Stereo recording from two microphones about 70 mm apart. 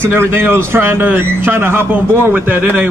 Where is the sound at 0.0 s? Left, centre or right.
Right.